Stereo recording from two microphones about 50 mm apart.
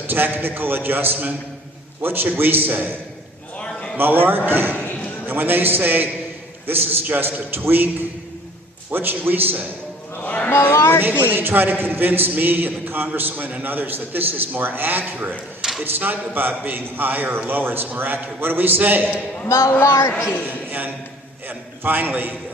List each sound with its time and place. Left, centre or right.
0.1 s a man's voice: right
8.9 s a man's voice: right
10.2 s speech: left
10.5 s speech: left
11.2 s a man's voice: right
19.5 s a woman's voice: left
20.5 s a man's voice: right